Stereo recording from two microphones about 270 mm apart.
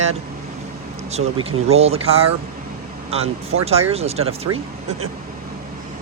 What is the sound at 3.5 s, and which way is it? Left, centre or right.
Speech, right.